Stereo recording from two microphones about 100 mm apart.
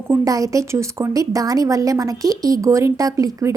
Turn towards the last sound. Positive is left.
turn(degrees=-35)  # may be behind; listen again after turning